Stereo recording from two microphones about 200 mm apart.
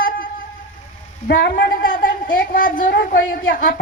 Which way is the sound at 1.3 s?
45° left (ahead or behind).